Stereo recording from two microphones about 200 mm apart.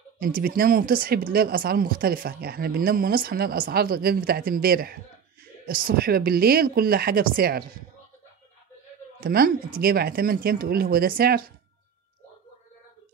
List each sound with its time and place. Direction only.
0.2 s speech: 45° right (ahead or behind)
9.2 s speech: 50° right (ahead or behind)